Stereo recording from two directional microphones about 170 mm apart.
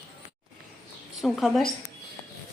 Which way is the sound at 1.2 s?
Centre (ahead or behind).